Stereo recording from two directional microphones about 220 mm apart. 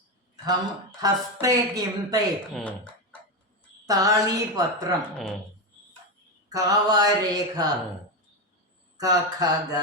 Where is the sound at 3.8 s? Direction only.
15° right (ahead or behind).